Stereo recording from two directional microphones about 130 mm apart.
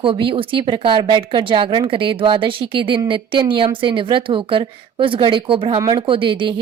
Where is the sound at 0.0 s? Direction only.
40° right (ahead or behind).